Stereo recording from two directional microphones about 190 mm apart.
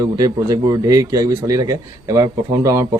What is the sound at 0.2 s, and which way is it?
Speech, 20° right (ahead or behind).